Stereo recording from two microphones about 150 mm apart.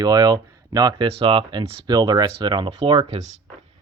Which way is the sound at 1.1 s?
40° right (ahead or behind).